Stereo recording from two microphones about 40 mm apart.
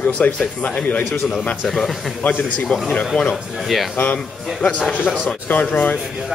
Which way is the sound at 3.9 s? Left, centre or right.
Left.